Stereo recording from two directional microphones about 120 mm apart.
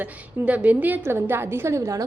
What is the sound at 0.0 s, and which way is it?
A woman's voice, 10° right (ahead or behind).